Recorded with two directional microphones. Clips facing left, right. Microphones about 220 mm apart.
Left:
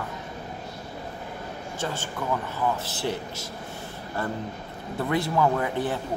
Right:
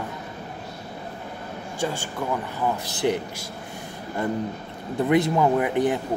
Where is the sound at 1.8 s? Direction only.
15° right (ahead or behind).